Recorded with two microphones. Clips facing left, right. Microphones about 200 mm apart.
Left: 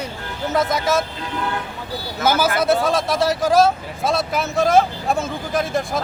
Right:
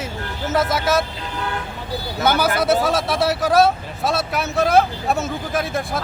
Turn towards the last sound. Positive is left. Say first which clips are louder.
# left 2 dB
turn(degrees=0)  # may be behind; listen again after turning